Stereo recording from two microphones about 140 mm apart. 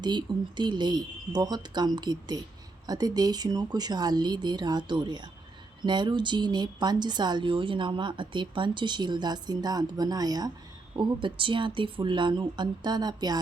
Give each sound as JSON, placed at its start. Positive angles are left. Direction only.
{"t": 0.0, "sound": "speech", "side_deg": -30}